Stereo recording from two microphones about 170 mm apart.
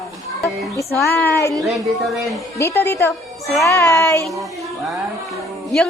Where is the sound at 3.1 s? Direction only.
Centre (ahead or behind).